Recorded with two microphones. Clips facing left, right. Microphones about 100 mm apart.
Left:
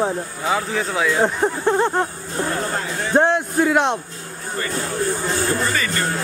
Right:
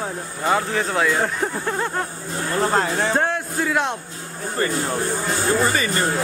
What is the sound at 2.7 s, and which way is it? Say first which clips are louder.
Speech: right 5 dB; 70° right (ahead or behind).